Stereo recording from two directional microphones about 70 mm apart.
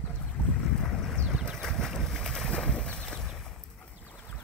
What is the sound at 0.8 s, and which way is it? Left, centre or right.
Boat, centre.